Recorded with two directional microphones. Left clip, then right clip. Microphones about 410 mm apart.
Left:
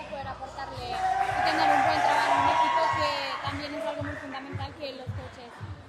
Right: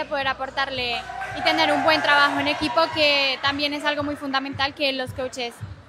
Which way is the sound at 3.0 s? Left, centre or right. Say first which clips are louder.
Right 9 dB; right.